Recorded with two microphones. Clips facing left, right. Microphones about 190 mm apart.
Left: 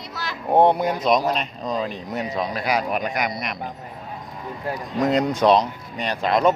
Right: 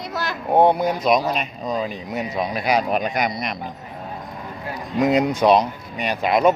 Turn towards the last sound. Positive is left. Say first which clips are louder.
# right 2 dB
turn(degrees=-10)  # may be behind; listen again after turning